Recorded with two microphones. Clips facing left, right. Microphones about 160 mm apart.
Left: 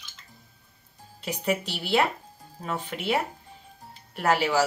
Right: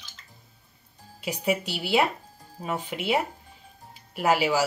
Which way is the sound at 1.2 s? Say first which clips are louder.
Right 1 dB; 10° right (ahead or behind).